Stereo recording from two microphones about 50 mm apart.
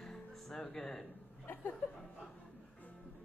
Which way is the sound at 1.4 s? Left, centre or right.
Left.